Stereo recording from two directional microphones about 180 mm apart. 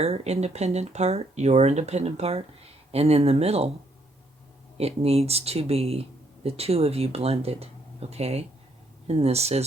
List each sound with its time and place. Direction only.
0.0 s speech: 35° right (ahead or behind)
4.8 s speech: 35° right (ahead or behind)